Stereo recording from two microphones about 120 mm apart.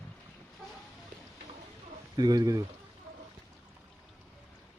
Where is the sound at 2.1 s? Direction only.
35° right (ahead or behind).